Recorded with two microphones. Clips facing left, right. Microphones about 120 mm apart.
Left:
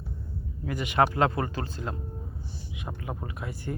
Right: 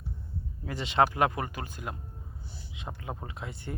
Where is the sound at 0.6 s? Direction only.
25° right (ahead or behind).